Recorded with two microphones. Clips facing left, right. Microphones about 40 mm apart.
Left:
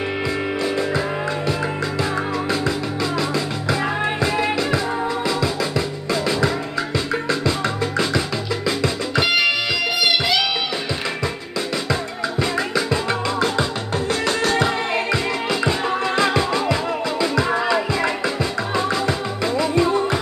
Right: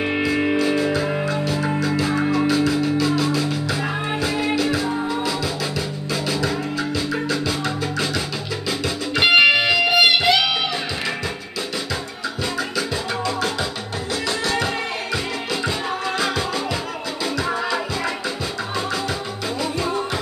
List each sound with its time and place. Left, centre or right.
0.9 s music: left
9.2 s music: right
12.4 s music: left
16.2 s music: left
19.6 s music: left